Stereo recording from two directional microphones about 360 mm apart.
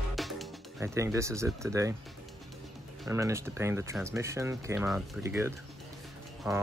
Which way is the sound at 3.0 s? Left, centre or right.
Centre.